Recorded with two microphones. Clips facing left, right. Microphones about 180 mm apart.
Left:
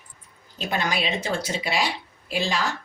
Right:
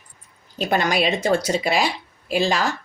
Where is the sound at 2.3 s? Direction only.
45° right (ahead or behind).